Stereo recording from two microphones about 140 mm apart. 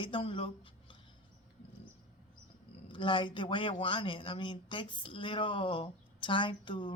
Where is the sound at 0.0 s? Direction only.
40° left (ahead or behind).